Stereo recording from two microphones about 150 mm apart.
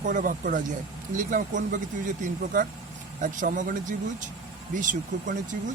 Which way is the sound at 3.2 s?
60° right (ahead or behind).